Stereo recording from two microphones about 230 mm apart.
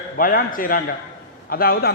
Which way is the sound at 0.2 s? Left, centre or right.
Left.